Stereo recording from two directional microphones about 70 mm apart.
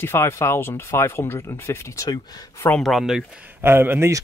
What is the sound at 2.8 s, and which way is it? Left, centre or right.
Speech, centre.